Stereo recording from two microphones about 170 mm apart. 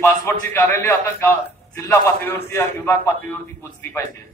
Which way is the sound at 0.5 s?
10° left (ahead or behind).